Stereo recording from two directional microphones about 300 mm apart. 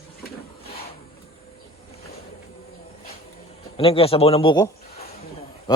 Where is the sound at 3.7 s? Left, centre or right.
Centre.